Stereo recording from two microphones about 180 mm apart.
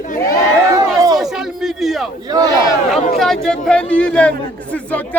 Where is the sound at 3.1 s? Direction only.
Centre (ahead or behind).